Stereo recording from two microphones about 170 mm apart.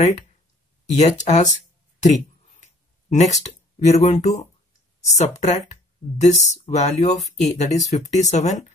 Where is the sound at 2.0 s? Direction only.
45° left (ahead or behind).